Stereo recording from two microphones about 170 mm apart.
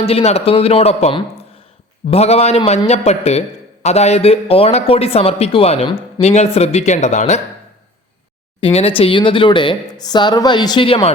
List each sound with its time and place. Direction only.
0.0 s a man's voice: 35° left (ahead or behind)
8.6 s speech: 35° left (ahead or behind)